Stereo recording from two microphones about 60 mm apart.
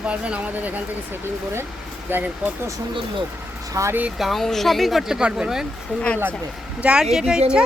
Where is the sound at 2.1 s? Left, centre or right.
Right.